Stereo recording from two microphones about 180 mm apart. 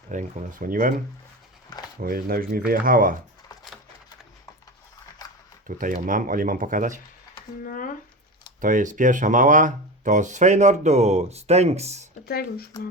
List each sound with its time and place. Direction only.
0.1 s speech: 45° right (ahead or behind)
2.0 s speech: 55° right (ahead or behind)
5.6 s speech: 50° right (ahead or behind)
7.6 s speech: 50° left (ahead or behind)
8.6 s speech: 45° right (ahead or behind)
12.2 s speech: 60° left (ahead or behind)